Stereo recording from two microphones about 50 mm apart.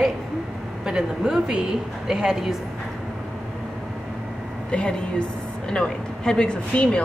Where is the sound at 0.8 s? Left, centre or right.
Centre.